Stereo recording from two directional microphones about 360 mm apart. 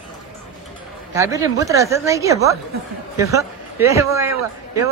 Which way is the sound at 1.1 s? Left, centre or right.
Centre.